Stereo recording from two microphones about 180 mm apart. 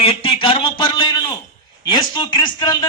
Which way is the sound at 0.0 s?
30° left (ahead or behind).